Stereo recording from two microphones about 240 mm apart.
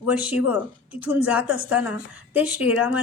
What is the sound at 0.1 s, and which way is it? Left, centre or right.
A woman's voice, centre.